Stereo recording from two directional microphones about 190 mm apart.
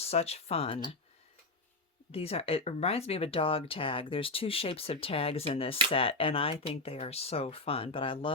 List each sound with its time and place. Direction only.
0.0 s speech: 35° left (ahead or behind)
2.1 s speech: 30° left (ahead or behind)